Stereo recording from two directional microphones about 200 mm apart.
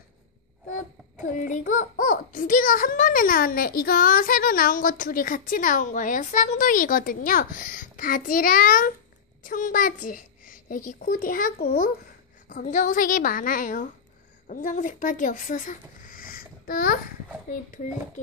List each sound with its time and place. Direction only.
1.4 s a child's voice: 40° left (ahead or behind)